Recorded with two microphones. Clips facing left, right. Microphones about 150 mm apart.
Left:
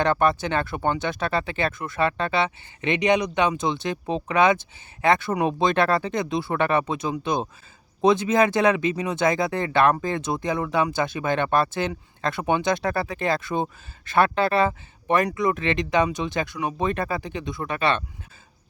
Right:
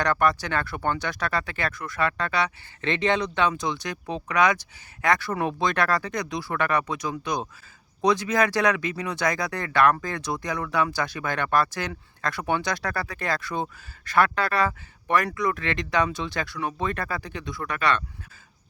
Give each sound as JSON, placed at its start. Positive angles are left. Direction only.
{"t": 0.0, "sound": "speech", "side_deg": 25}